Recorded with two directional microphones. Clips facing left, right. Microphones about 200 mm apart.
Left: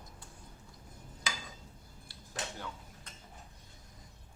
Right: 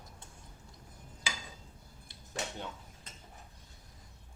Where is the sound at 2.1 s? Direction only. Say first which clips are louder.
Right 2 dB; 20° right (ahead or behind).